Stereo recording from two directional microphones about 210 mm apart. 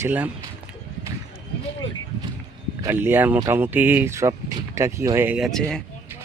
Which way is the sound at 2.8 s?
10° right (ahead or behind).